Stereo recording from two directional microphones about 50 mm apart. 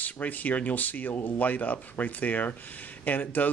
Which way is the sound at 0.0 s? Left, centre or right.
Left.